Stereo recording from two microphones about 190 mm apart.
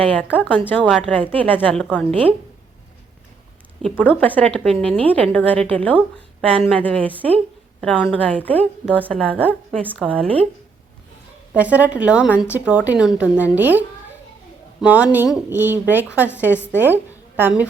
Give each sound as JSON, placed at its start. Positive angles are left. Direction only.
{"t": 0.0, "sound": "a woman's voice", "side_deg": 5}
{"t": 2.0, "sound": "a woman's voice", "side_deg": -30}
{"t": 3.8, "sound": "a woman's voice", "side_deg": 5}
{"t": 11.5, "sound": "a woman's voice", "side_deg": -10}